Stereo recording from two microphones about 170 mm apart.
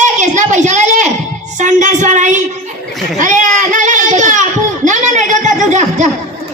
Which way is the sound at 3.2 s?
45° right (ahead or behind).